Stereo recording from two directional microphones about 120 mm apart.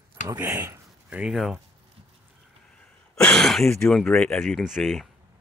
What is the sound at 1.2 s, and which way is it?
Speech, centre (ahead or behind).